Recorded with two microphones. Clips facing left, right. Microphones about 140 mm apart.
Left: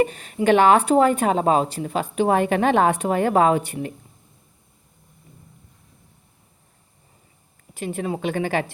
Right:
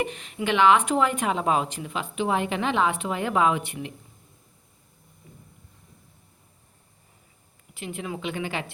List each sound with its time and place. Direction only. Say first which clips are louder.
0.0 s speech: left 8 dB; 40° left (ahead or behind)
7.7 s a woman's voice: left 7 dB; 40° left (ahead or behind)